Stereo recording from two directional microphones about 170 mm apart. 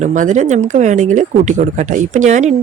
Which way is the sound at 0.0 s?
45° right (ahead or behind).